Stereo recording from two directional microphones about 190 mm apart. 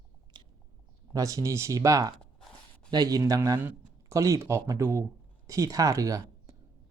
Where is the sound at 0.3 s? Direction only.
25° right (ahead or behind).